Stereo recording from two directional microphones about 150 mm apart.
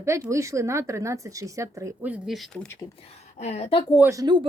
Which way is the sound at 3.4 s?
45° left (ahead or behind).